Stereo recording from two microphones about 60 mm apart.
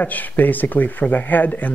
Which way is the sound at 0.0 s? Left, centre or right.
Left.